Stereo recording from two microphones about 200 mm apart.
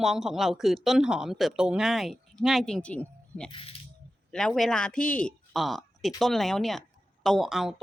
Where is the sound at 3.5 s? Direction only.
25° left (ahead or behind).